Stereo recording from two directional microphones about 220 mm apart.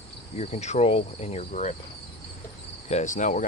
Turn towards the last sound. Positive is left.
turn(degrees=35)  # may be behind; listen again after turning